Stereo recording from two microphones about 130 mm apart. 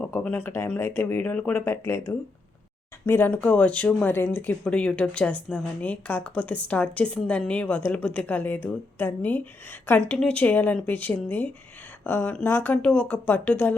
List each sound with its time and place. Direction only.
0.0 s a woman's voice: 10° left (ahead or behind)